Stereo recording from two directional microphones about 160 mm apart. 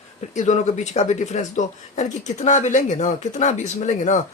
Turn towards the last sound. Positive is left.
turn(degrees=50)  # may be behind; listen again after turning